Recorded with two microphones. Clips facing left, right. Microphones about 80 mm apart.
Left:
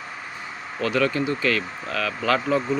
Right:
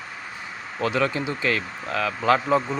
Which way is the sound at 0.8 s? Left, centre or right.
Right.